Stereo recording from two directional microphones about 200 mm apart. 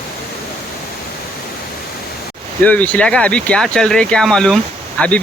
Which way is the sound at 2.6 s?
5° left (ahead or behind).